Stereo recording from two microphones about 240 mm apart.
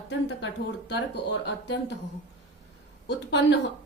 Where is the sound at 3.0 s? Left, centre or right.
Left.